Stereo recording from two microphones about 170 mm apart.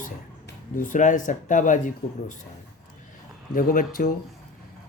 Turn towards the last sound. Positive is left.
turn(degrees=55)  # may be behind; listen again after turning